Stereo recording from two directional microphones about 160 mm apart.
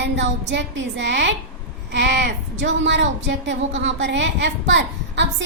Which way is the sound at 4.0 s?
90° right.